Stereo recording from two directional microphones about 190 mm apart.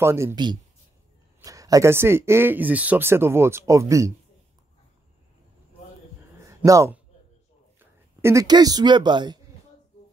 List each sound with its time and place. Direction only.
0.0 s speech: 15° right (ahead or behind)
6.3 s a sound: 15° right (ahead or behind)
7.8 s speech: 15° right (ahead or behind)